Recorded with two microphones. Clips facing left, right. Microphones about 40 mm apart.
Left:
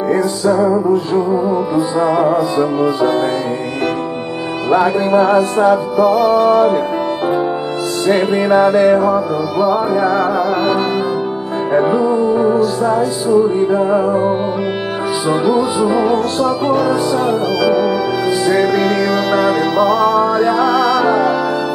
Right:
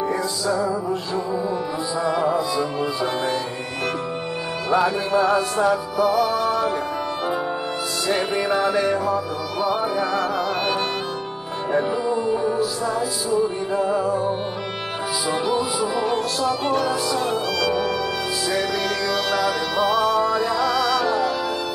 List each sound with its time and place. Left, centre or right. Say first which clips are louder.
0.1 s music: left 9 dB; left
4.6 s music: left 7 dB; left
8.3 s music: left 9 dB; left
8.6 s music: left 10 dB; left
9.6 s music: left 8 dB; centre
11.7 s music: left 9 dB; centre
12.1 s music: left 8 dB; centre
13.7 s music: left 8 dB; left
16.4 s music: left 5 dB; centre
18.4 s music: left 10 dB; left
19.8 s music: left 6 dB; centre
20.2 s music: left 8 dB; left